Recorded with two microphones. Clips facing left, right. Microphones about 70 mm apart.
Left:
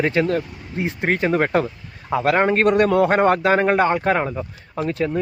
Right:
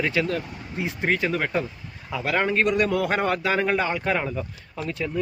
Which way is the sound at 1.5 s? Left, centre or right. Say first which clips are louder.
Left 7 dB; left.